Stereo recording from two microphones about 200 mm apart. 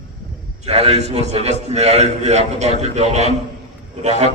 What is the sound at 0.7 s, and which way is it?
A man's voice, 30° right (ahead or behind).